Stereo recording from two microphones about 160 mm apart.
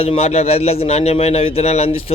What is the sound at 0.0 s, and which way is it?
A man's voice, 40° left (ahead or behind).